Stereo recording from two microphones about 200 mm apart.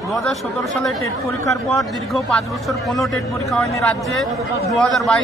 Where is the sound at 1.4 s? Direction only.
15° left (ahead or behind).